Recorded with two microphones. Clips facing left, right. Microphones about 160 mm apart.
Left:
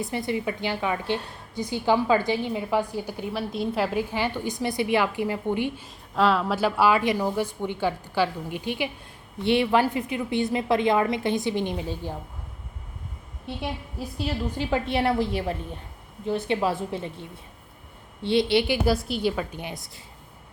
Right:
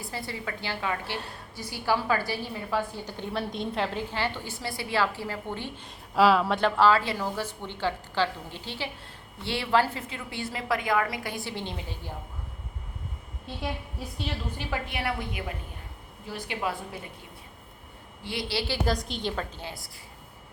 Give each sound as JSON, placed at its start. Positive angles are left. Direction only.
{"t": 0.0, "sound": "a woman's voice", "side_deg": 20}
{"t": 5.8, "sound": "a woman's voice", "side_deg": -5}
{"t": 14.0, "sound": "a woman's voice", "side_deg": 0}
{"t": 14.5, "sound": "a woman's voice", "side_deg": 20}
{"t": 16.2, "sound": "a woman's voice", "side_deg": 25}
{"t": 18.2, "sound": "a woman's voice", "side_deg": 25}
{"t": 18.9, "sound": "a woman's voice", "side_deg": 5}